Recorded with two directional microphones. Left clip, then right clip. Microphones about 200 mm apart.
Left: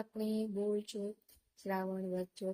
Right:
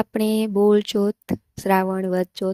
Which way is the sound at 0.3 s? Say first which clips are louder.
Right 19 dB; 50° right (ahead or behind).